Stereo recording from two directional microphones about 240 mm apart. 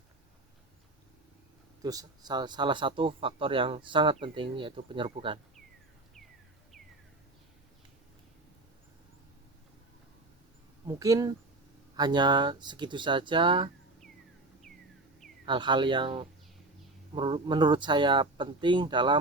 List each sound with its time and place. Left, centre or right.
1.8 s speech: centre
10.8 s speech: centre
15.4 s speech: centre